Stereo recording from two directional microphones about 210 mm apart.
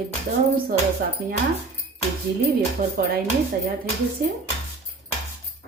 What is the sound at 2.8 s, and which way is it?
Speech, 35° right (ahead or behind).